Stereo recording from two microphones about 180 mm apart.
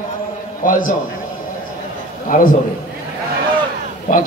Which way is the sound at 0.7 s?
50° left (ahead or behind).